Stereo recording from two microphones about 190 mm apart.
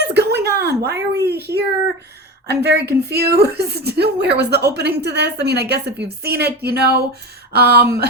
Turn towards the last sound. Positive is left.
turn(degrees=-55)  # may be behind; listen again after turning